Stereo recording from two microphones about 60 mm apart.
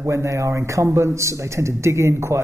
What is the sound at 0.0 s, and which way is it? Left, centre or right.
Speech, right.